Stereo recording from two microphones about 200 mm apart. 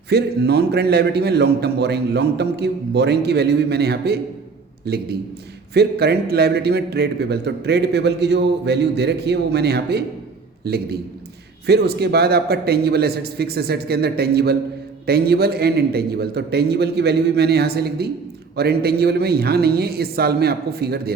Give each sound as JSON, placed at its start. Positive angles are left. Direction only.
{"t": 0.1, "sound": "a man's voice", "side_deg": -55}